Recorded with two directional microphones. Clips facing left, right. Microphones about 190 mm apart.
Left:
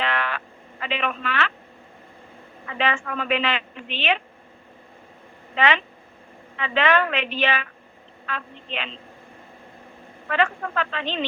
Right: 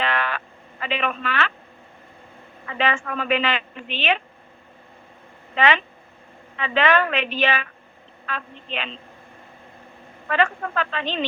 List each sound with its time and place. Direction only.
0.0 s a sound: 40° right (ahead or behind)
0.9 s a woman's voice: 45° right (ahead or behind)
2.7 s a woman's voice: 45° right (ahead or behind)
5.5 s a woman's voice: 45° right (ahead or behind)
10.3 s a woman's voice: 45° right (ahead or behind)